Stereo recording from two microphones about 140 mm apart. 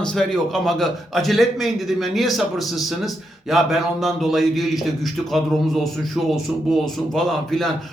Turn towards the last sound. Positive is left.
turn(degrees=0)  # may be behind; listen again after turning